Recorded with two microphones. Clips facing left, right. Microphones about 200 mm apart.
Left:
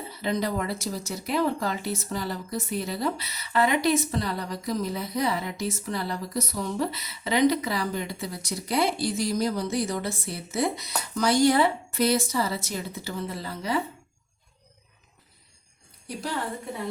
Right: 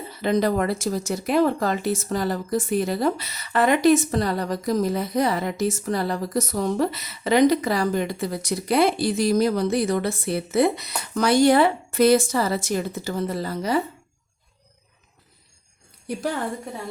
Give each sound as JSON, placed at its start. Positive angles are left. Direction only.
{"t": 0.2, "sound": "a woman's voice", "side_deg": -60}